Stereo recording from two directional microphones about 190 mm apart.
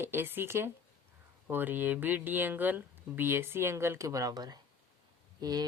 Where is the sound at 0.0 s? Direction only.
10° right (ahead or behind).